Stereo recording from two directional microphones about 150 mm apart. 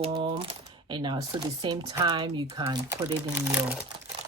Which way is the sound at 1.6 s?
30° right (ahead or behind).